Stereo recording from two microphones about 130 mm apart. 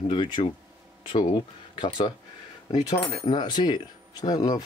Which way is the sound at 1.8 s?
40° left (ahead or behind).